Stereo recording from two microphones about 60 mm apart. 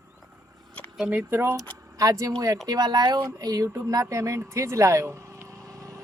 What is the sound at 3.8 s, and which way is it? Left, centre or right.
A woman's voice, right.